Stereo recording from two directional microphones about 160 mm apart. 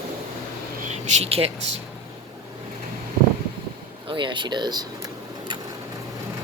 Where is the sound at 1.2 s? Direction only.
35° right (ahead or behind).